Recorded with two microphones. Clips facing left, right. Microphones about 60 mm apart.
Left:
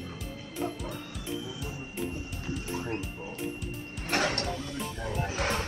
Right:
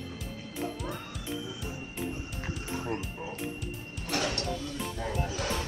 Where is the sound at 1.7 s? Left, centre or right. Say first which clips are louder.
Left 1 dB; right.